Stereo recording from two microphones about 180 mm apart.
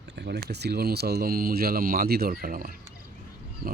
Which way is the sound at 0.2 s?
65° right (ahead or behind).